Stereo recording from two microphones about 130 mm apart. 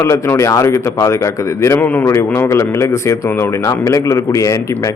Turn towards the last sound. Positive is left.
turn(degrees=25)  # may be behind; listen again after turning